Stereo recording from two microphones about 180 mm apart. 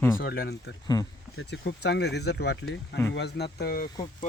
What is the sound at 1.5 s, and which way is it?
Speech, 70° left (ahead or behind).